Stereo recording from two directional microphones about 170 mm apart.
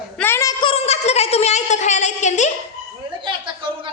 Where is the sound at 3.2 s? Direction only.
30° right (ahead or behind).